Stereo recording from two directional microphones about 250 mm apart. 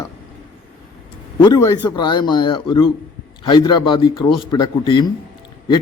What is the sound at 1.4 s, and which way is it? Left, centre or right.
A man's voice, centre.